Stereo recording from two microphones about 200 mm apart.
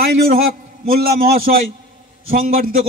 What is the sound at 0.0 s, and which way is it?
A man's voice, 50° right (ahead or behind).